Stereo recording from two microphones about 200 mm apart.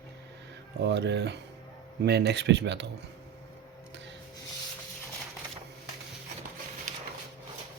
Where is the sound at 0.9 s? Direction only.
60° right (ahead or behind).